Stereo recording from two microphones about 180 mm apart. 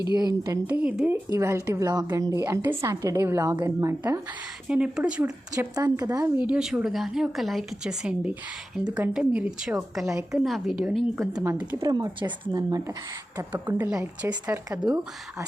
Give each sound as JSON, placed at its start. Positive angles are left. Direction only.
{"t": 0.0, "sound": "a woman's voice", "side_deg": -20}
{"t": 4.7, "sound": "a woman's voice", "side_deg": -5}
{"t": 5.5, "sound": "a woman's voice", "side_deg": -20}
{"t": 11.9, "sound": "speech", "side_deg": -20}
{"t": 13.7, "sound": "a woman's voice", "side_deg": -10}